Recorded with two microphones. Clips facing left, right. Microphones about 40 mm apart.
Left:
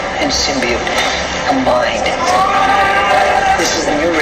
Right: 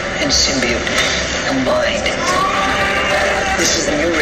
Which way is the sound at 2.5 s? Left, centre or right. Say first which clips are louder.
Left 5 dB; left.